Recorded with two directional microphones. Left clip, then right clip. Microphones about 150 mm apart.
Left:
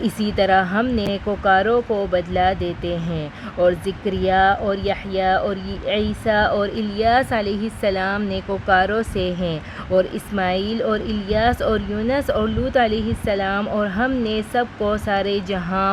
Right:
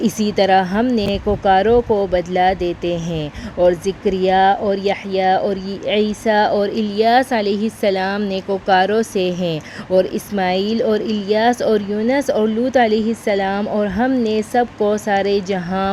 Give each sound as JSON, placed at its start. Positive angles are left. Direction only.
{"t": 0.0, "sound": "speech", "side_deg": -25}